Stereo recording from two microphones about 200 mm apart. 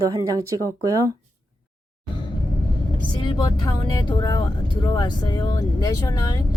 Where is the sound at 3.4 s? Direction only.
20° left (ahead or behind).